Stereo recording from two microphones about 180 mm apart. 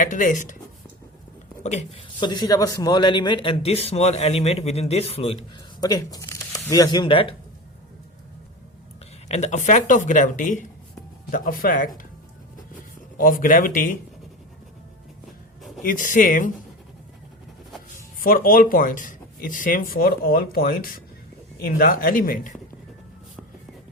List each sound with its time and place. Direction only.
0.0 s speech: 45° left (ahead or behind)
1.6 s speech: 40° left (ahead or behind)
2.2 s speech: 25° left (ahead or behind)
5.8 s speech: 20° left (ahead or behind)
9.3 s speech: 40° left (ahead or behind)
13.1 s speech: 50° left (ahead or behind)
15.8 s speech: 45° left (ahead or behind)
17.9 s speech: 50° left (ahead or behind)